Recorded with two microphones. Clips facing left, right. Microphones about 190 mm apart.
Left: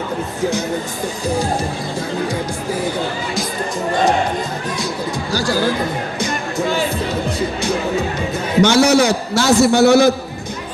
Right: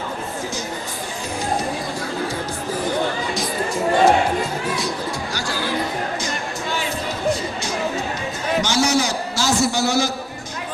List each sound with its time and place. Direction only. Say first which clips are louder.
3.3 s speech: left 1 dB; 10° right (ahead or behind)
5.3 s speech: left 8 dB; 40° left (ahead or behind)
8.6 s a man's voice: left 9 dB; 60° left (ahead or behind)